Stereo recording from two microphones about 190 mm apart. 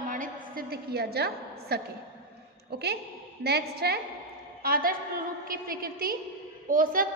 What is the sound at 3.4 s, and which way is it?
A woman's voice, 60° right (ahead or behind).